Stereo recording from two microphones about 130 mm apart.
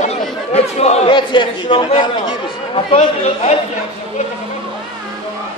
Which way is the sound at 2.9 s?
55° left (ahead or behind).